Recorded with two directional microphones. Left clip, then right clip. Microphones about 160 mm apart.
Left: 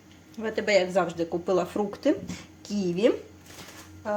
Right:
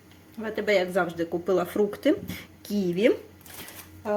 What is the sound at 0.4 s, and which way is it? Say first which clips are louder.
Speech: left 1 dB; centre (ahead or behind).